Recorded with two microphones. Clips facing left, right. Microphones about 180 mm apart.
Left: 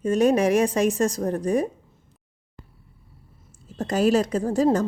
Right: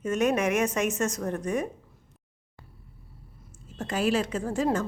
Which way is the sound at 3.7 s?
40° left (ahead or behind).